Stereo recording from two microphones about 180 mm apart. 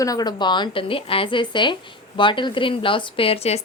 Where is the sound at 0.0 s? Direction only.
20° left (ahead or behind).